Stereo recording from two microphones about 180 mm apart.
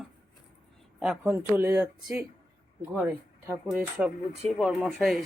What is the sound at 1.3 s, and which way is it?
Speech, 15° right (ahead or behind).